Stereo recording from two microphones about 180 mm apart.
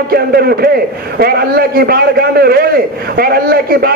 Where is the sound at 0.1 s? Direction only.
60° right (ahead or behind).